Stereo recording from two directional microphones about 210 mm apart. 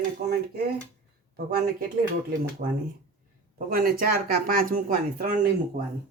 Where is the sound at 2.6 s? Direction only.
40° right (ahead or behind).